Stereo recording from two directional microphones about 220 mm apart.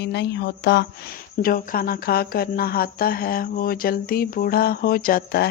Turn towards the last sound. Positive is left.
turn(degrees=45)  # may be behind; listen again after turning